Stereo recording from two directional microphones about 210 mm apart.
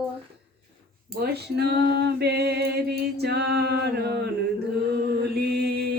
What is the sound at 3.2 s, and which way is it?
Male singing, 50° right (ahead or behind).